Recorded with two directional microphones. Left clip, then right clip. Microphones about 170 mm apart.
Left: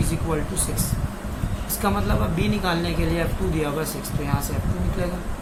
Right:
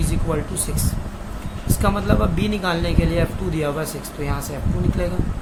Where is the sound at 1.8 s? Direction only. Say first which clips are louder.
Right 3 dB; 60° right (ahead or behind).